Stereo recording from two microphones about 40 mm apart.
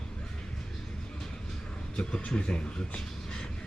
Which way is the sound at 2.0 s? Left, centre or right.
Left.